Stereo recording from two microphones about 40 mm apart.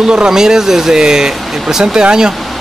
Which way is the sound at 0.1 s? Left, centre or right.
Centre.